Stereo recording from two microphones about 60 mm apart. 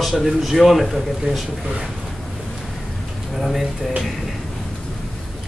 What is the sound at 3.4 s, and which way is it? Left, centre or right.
Speech, centre.